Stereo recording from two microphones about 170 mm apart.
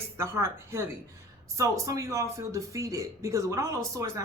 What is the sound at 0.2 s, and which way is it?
Speech, 15° right (ahead or behind).